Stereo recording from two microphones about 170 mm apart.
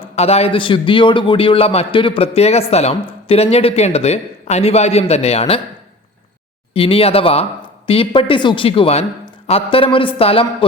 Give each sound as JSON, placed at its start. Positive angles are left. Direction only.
{"t": 0.2, "sound": "a man's voice", "side_deg": 35}
{"t": 6.7, "sound": "a man's voice", "side_deg": 30}